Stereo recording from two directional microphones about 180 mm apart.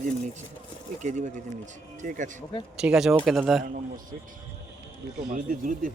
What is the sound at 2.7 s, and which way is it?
Speech, 5° right (ahead or behind).